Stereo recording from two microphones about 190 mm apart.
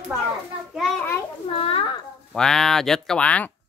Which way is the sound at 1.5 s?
30° left (ahead or behind).